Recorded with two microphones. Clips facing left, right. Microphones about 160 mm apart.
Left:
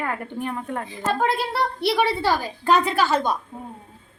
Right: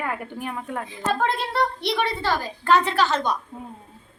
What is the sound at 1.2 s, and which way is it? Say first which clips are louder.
A woman's voice: left 1 dB; 5° left (ahead or behind).